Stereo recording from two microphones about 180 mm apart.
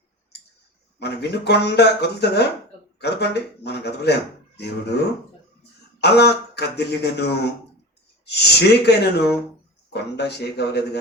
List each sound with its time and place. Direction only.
0.9 s speech: 65° left (ahead or behind)
6.0 s speech: 65° left (ahead or behind)